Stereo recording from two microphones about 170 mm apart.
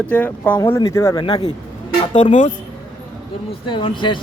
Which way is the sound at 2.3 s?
45° left (ahead or behind).